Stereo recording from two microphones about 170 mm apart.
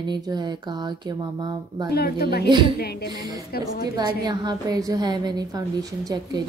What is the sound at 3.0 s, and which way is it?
Speech, 20° right (ahead or behind).